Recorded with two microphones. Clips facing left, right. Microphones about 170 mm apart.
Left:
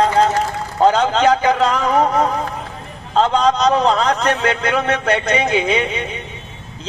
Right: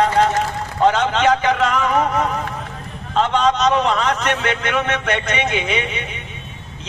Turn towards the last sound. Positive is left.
turn(degrees=35)  # may be behind; listen again after turning